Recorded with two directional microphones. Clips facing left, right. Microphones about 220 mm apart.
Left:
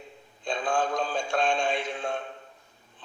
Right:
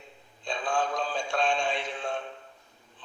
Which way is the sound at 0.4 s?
45° left (ahead or behind).